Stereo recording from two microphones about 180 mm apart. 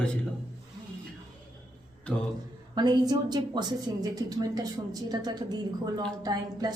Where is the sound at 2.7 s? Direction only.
20° right (ahead or behind).